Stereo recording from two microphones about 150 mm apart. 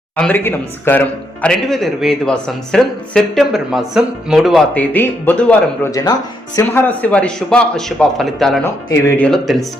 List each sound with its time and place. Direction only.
0.2 s speech: 10° left (ahead or behind)
4.7 s a man's voice: 10° left (ahead or behind)
5.9 s speech: 25° left (ahead or behind)
6.6 s a man's voice: 15° left (ahead or behind)
8.6 s a man's voice: 15° left (ahead or behind)